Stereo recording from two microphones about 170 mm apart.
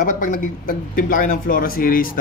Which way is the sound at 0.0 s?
50° left (ahead or behind).